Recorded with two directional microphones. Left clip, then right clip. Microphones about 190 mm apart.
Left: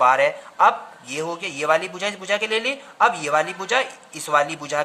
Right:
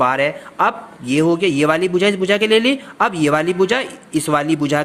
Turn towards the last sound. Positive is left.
turn(degrees=-25)  # may be behind; listen again after turning